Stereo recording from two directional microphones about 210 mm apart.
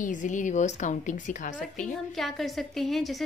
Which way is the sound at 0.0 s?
35° left (ahead or behind).